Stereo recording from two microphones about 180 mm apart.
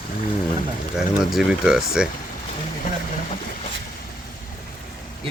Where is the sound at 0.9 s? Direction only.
Centre (ahead or behind).